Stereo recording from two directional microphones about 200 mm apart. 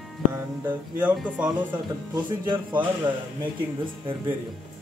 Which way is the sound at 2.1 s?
20° right (ahead or behind).